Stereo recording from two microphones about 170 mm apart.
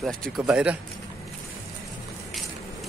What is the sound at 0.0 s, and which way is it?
Speech, 5° right (ahead or behind).